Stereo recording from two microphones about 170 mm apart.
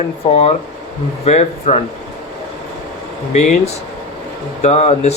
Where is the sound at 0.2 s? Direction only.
35° left (ahead or behind).